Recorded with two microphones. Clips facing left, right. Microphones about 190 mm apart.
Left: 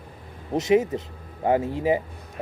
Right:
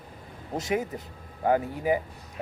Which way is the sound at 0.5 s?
20° left (ahead or behind).